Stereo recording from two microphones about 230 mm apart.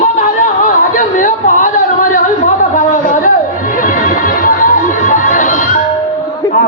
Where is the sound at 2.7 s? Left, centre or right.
Left.